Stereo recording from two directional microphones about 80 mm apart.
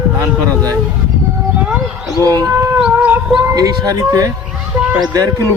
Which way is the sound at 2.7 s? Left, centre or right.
Centre.